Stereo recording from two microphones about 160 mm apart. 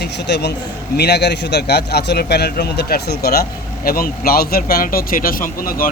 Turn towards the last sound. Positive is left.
turn(degrees=60)  # may be behind; listen again after turning